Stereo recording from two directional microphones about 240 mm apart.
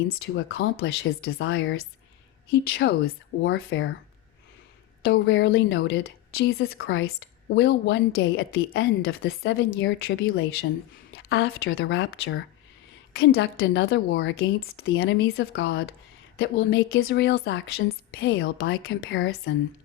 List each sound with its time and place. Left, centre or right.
0.3 s a woman's voice: left
1.2 s a woman's voice: left
2.5 s a woman's voice: left
5.0 s a woman's voice: left
6.0 s a woman's voice: left
11.1 s a woman's voice: left
15.0 s a woman's voice: left